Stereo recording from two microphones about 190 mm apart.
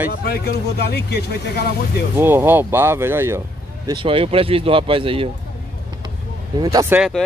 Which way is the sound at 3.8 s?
25° right (ahead or behind).